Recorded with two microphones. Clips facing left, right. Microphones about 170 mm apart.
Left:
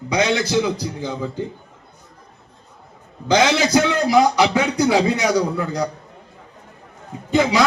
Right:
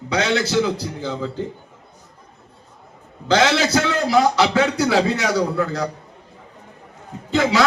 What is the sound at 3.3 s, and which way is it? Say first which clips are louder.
A man's voice: left 1 dB; 15° left (ahead or behind).